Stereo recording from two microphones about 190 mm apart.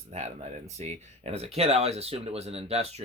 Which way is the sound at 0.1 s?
35° right (ahead or behind).